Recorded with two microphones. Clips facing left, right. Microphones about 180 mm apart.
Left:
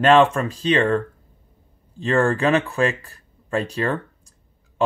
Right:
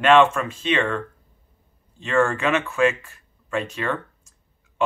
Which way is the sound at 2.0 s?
35° left (ahead or behind).